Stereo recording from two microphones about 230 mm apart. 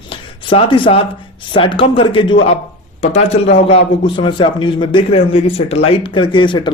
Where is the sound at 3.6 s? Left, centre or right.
Left.